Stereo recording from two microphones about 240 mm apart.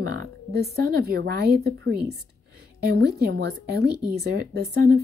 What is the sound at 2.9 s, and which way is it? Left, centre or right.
Speech, right.